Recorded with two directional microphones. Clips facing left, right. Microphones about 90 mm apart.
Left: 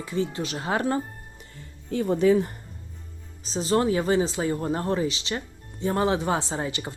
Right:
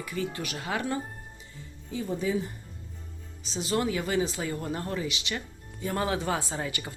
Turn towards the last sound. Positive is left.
turn(degrees=25)  # may be behind; listen again after turning